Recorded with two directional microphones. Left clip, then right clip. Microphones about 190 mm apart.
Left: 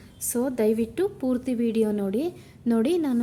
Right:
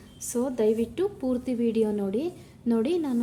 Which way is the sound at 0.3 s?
35° left (ahead or behind).